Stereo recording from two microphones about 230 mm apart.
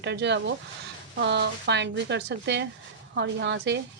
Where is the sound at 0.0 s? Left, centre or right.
Right.